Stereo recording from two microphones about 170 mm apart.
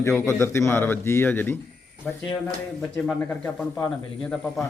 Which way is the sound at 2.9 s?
5° left (ahead or behind).